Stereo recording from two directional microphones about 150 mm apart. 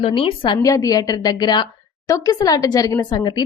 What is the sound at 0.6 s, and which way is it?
A woman's voice, 20° left (ahead or behind).